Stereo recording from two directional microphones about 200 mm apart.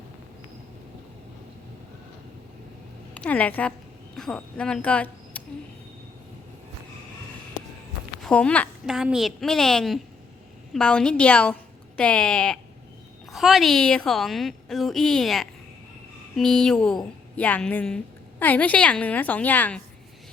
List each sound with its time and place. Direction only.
3.2 s a woman's voice: 5° left (ahead or behind)
8.2 s a woman's voice: 5° left (ahead or behind)